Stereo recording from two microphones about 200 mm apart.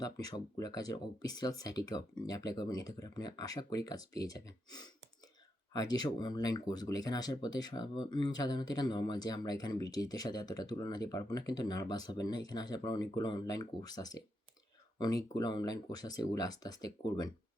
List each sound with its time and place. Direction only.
0.0 s speech: 20° left (ahead or behind)